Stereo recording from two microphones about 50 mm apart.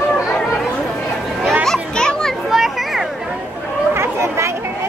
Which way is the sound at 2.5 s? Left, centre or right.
Centre.